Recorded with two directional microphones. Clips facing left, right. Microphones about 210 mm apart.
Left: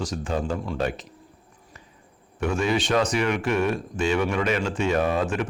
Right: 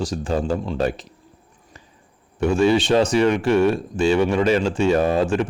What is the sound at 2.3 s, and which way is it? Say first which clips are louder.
Speech: right 7 dB; 30° right (ahead or behind).